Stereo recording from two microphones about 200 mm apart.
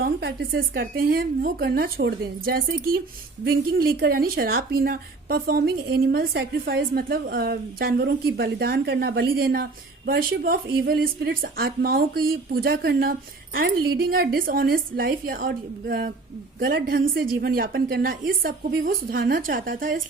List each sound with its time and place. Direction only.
0.0 s a woman's voice: 50° right (ahead or behind)